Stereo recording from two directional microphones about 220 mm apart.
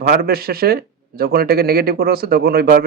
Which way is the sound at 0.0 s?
45° right (ahead or behind).